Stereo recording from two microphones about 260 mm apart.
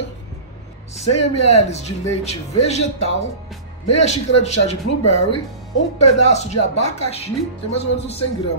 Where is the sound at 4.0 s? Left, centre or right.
Left.